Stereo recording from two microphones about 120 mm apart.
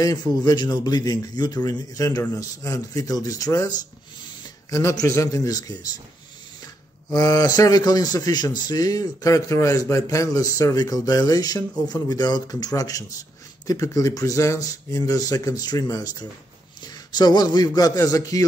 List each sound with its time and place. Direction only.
0.0 s a man's voice: 30° left (ahead or behind)